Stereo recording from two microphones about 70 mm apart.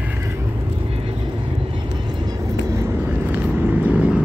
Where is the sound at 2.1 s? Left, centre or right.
Right.